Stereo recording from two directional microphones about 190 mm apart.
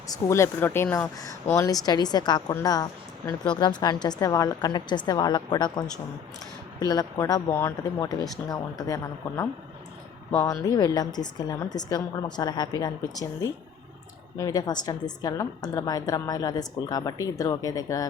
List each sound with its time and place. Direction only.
0.1 s a woman's voice: 15° left (ahead or behind)